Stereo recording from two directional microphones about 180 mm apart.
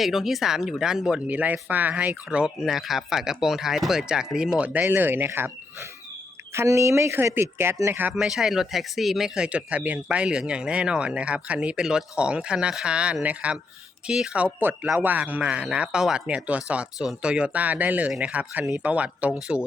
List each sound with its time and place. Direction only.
0.0 s speech: centre (ahead or behind)